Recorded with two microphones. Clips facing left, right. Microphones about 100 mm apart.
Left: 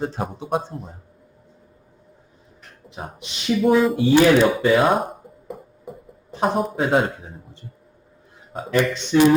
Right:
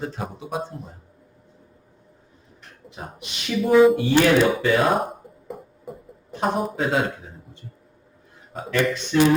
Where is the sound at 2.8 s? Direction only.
25° left (ahead or behind).